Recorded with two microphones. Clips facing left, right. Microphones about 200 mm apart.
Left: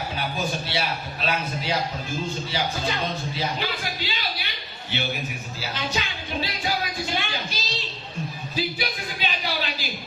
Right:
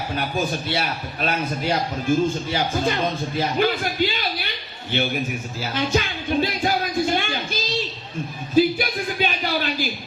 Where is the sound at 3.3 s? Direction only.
50° right (ahead or behind).